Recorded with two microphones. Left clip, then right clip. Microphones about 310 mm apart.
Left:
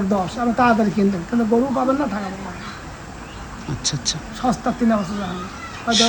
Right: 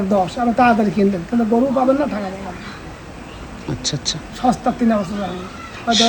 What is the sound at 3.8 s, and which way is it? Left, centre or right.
Speech, centre.